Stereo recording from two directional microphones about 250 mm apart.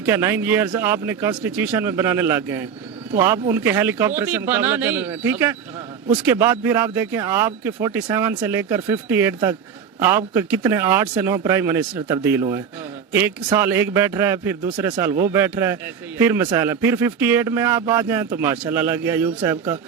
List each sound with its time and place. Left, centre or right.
0.0 s a man's voice: centre